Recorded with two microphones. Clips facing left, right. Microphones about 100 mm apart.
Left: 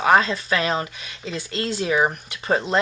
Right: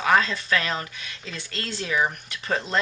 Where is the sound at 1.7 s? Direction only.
30° left (ahead or behind).